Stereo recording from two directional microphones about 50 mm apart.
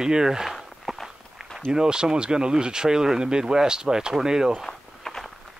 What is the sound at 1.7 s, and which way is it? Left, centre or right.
Speech, centre.